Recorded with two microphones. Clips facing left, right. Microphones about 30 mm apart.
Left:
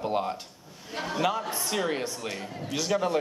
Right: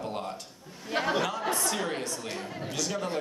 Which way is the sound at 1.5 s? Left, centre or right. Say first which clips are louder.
Left 1 dB; centre.